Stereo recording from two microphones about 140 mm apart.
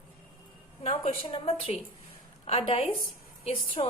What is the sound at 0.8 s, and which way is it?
A woman's voice, 45° left (ahead or behind).